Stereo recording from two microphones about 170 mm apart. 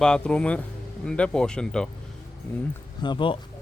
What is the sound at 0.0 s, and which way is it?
Speech, 5° left (ahead or behind).